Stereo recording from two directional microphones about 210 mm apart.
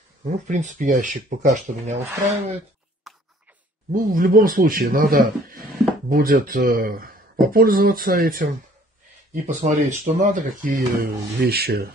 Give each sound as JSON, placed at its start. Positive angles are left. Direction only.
{"t": 0.2, "sound": "speech", "side_deg": -35}
{"t": 3.1, "sound": "a sound", "side_deg": 0}
{"t": 3.9, "sound": "a man's voice", "side_deg": -40}